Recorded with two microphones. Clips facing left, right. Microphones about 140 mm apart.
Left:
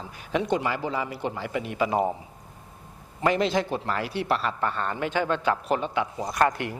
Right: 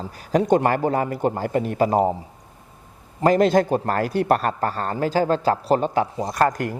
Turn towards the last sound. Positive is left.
turn(degrees=-45)  # may be behind; listen again after turning